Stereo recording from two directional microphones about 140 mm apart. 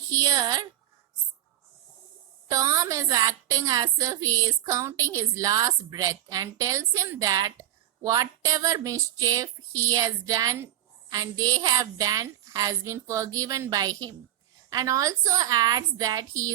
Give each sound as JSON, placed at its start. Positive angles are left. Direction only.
{"t": 0.1, "sound": "a woman's voice", "side_deg": -25}
{"t": 2.5, "sound": "a woman's voice", "side_deg": -25}